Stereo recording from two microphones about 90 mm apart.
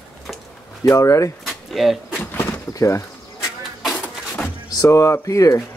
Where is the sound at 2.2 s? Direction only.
25° left (ahead or behind).